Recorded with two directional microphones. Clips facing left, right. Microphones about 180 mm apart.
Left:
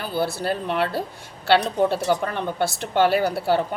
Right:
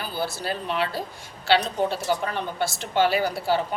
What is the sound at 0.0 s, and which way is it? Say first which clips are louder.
A woman's voice: left 5 dB; 60° left (ahead or behind).